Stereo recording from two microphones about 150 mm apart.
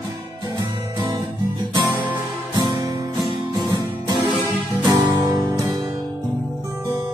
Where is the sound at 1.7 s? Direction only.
30° right (ahead or behind).